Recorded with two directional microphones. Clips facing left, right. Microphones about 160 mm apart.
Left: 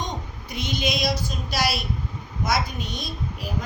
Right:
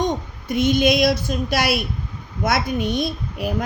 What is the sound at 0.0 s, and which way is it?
A woman's voice, 50° right (ahead or behind).